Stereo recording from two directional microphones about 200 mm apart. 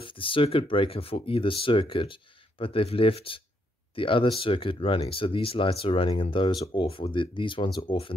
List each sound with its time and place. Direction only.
0.0 s speech: 25° left (ahead or behind)